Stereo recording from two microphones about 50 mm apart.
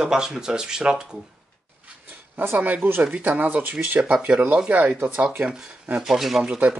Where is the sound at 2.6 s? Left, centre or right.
Right.